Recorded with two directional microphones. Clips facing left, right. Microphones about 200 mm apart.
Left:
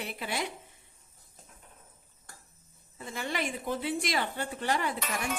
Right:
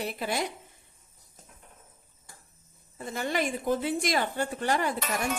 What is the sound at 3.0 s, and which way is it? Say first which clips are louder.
A woman's voice: right 4 dB; 45° right (ahead or behind).